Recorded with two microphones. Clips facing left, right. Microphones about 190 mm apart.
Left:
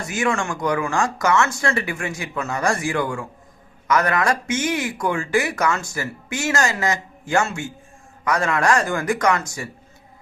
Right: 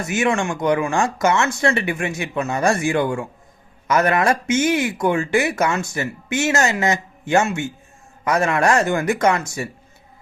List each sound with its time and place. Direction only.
0.0 s speech: 25° right (ahead or behind)